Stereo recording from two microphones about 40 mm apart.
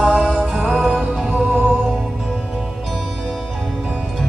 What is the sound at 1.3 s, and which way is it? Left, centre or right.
Music, right.